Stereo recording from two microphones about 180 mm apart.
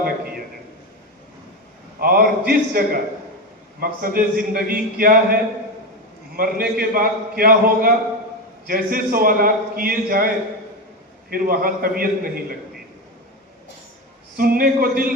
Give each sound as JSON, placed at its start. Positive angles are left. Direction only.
{"t": 2.0, "sound": "a man's voice", "side_deg": -50}
{"t": 14.3, "sound": "a man's voice", "side_deg": -55}